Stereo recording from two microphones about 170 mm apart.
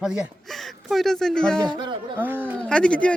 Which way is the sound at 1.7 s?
25° right (ahead or behind).